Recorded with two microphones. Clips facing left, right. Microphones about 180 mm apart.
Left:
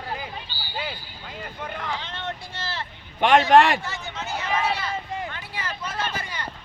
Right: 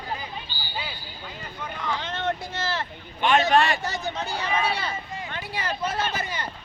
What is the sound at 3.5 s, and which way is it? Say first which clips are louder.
Speech: left 5 dB; 90° left.